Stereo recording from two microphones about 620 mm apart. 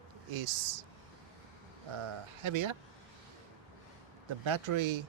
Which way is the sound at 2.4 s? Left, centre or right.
Right.